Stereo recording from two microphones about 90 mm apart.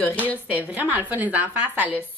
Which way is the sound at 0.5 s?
20° right (ahead or behind).